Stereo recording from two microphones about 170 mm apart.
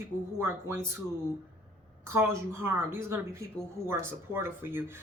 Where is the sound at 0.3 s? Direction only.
15° right (ahead or behind).